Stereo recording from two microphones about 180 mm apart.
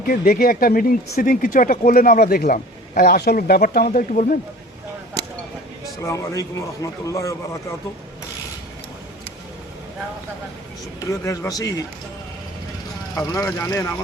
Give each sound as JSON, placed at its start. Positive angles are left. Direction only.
{"t": 0.1, "sound": "speech", "side_deg": 55}
{"t": 6.0, "sound": "a man's voice", "side_deg": 15}
{"t": 11.0, "sound": "speech", "side_deg": 15}
{"t": 13.3, "sound": "a man's voice", "side_deg": 20}